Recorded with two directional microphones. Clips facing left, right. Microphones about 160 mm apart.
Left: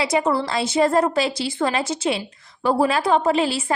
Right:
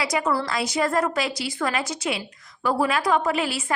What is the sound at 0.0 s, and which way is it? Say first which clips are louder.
A woman's voice: left 4 dB; 25° left (ahead or behind).